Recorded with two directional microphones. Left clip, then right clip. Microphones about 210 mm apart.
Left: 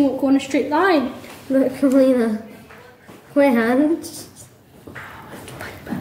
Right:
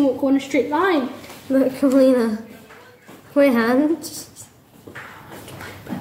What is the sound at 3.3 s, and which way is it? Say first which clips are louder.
Speech: even; 20° right (ahead or behind).